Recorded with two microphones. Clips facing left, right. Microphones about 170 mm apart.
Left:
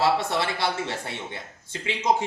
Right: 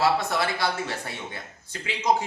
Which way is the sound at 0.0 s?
30° left (ahead or behind).